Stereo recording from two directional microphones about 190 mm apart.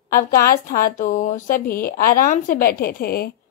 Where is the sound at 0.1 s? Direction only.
50° left (ahead or behind).